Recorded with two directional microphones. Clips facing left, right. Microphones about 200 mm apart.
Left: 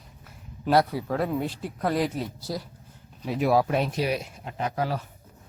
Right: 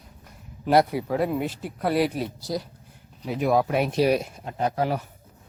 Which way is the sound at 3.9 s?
40° right (ahead or behind).